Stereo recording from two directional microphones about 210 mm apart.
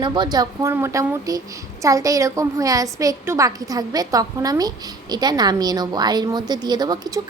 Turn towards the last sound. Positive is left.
turn(degrees=-20)  # may be behind; listen again after turning